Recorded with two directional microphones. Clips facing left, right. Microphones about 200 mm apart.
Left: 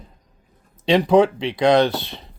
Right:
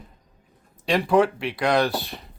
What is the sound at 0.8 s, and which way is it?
Speech, 20° left (ahead or behind).